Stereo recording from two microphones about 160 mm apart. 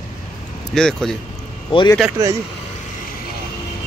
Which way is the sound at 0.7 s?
5° left (ahead or behind).